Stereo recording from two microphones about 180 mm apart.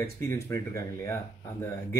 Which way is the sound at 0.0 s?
15° left (ahead or behind).